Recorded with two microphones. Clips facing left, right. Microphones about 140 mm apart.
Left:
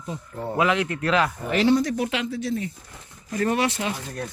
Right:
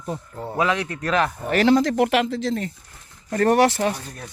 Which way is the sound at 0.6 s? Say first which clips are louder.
Even; 30° right (ahead or behind).